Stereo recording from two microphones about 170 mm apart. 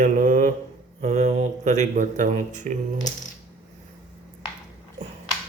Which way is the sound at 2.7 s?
45° right (ahead or behind).